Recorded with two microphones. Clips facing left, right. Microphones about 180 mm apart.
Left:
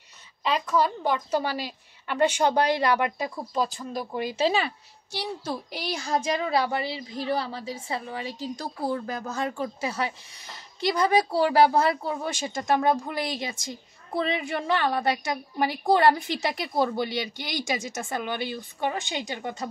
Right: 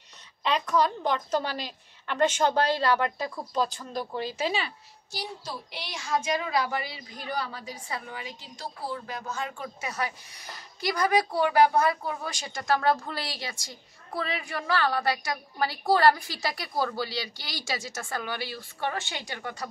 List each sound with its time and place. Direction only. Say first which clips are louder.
0.4 s a woman's voice: left 1 dB; 5° left (ahead or behind)
4.6 s a child's voice: left 5 dB; 60° left (ahead or behind); by 19.7 s 20° left (ahead or behind)